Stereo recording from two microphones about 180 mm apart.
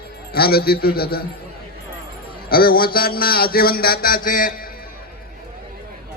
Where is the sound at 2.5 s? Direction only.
55° left (ahead or behind).